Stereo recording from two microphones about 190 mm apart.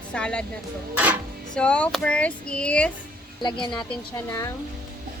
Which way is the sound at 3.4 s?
25° left (ahead or behind).